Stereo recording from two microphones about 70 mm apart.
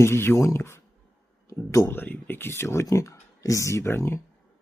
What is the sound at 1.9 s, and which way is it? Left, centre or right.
Speech, left.